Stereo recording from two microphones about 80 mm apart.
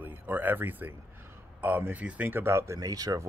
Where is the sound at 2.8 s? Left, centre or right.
Right.